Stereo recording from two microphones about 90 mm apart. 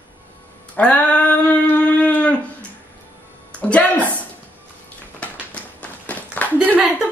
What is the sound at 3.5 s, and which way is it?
Speech, 15° left (ahead or behind).